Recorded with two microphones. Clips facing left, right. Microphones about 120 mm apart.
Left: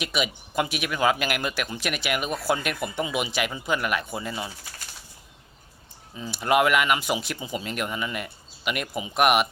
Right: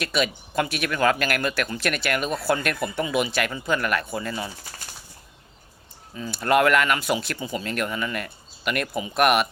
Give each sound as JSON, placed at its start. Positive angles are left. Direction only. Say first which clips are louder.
{"t": 0.0, "sound": "speech", "louder": "right 3 dB", "side_deg": 15}
{"t": 6.1, "sound": "speech", "louder": "right 1 dB", "side_deg": 15}